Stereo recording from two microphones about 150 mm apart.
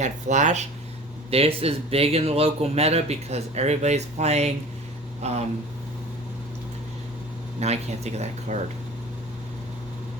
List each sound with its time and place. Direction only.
0.0 s speech: 50° right (ahead or behind)
1.3 s speech: 40° right (ahead or behind)
7.6 s speech: 45° right (ahead or behind)